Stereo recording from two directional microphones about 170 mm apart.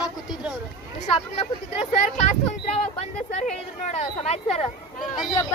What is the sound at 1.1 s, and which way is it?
Speech, 35° left (ahead or behind).